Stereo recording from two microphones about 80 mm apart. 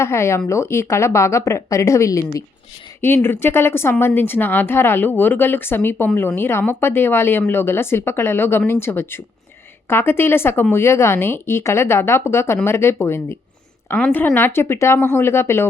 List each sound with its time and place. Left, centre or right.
0.0 s speech: left